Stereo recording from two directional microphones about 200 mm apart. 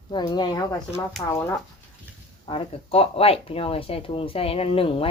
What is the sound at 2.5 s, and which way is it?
Speech, 30° left (ahead or behind).